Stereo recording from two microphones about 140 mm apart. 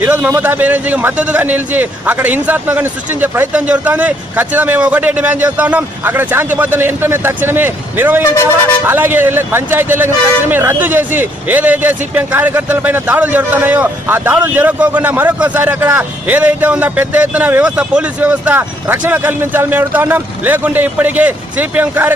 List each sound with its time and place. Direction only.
0.0 s a man's voice: 10° right (ahead or behind)